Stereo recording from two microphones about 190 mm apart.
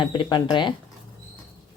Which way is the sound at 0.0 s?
25° left (ahead or behind).